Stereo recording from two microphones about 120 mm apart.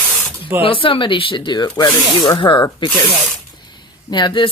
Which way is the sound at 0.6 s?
45° left (ahead or behind).